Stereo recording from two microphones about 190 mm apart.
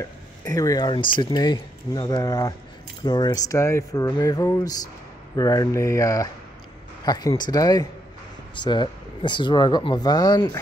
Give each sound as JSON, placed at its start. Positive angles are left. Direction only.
{"t": 0.5, "sound": "speech", "side_deg": 20}